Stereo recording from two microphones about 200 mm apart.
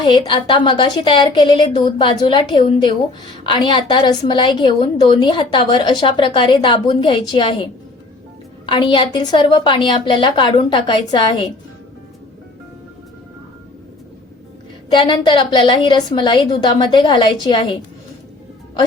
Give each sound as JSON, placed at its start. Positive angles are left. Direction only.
{"t": 0.0, "sound": "a woman's voice", "side_deg": 25}
{"t": 14.9, "sound": "a woman's voice", "side_deg": 20}